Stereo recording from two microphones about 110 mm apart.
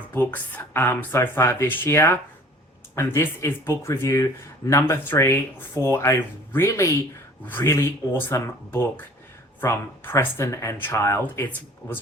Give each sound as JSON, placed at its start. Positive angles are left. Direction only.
{"t": 0.1, "sound": "speech", "side_deg": 15}